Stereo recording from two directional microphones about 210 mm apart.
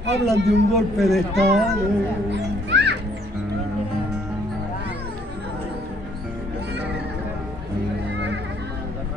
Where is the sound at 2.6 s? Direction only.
55° right (ahead or behind).